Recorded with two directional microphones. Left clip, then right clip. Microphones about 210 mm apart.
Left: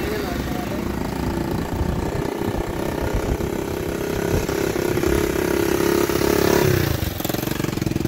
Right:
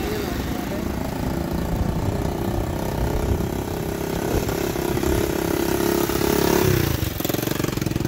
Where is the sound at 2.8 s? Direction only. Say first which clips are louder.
Left 2 dB; 50° right (ahead or behind); by 7.8 s 25° right (ahead or behind).